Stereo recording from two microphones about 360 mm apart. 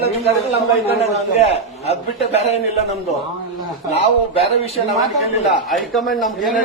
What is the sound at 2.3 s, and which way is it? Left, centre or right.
Speech, centre.